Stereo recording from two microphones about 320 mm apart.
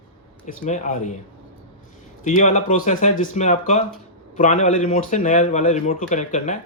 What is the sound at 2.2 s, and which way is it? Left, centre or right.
A man's voice, left.